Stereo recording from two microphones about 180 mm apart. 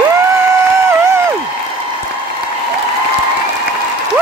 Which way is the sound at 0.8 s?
15° right (ahead or behind).